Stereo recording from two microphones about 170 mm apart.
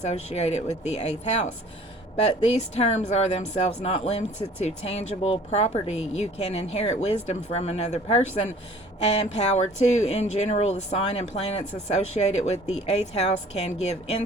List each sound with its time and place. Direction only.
0.0 s speech: 40° left (ahead or behind)